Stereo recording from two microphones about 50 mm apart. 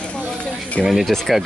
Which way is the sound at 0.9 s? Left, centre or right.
Centre.